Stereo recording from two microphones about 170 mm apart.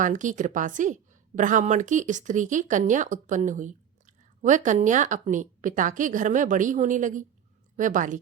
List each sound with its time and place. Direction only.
0.0 s speech: 50° right (ahead or behind)